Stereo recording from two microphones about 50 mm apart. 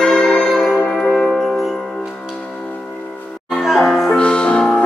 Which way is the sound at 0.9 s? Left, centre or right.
Centre.